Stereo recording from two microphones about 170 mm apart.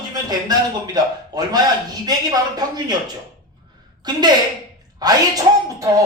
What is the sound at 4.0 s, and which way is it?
Speech, 25° right (ahead or behind).